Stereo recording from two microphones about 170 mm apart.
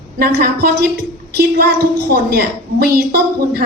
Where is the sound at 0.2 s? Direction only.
65° right (ahead or behind).